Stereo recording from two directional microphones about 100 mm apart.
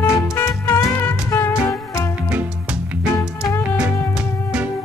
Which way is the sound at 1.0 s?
30° left (ahead or behind).